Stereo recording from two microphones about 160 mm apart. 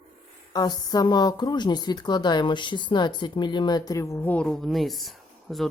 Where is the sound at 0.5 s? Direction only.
25° left (ahead or behind).